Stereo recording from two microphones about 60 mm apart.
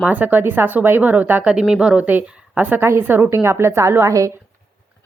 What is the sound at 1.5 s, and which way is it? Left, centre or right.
Speech, centre.